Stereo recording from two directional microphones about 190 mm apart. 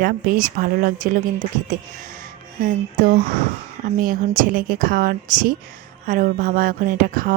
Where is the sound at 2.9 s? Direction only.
45° right (ahead or behind).